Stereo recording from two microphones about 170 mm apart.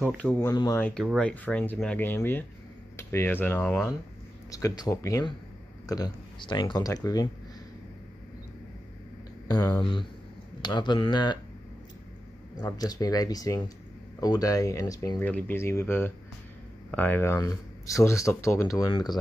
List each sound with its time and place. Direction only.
0.0 s speech: 10° left (ahead or behind)
0.5 s speech: 20° left (ahead or behind)
0.7 s speech: 5° left (ahead or behind)
4.5 s speech: 20° left (ahead or behind)
9.5 s speech: 20° left (ahead or behind)
12.7 s speech: 20° left (ahead or behind)